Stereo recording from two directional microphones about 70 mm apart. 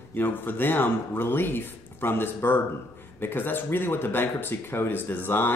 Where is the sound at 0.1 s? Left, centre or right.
Left.